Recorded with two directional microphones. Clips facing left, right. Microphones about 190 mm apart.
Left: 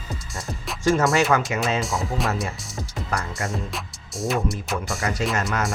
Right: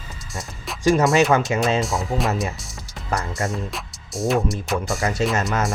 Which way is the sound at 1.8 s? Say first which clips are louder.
Right 3 dB; centre (ahead or behind).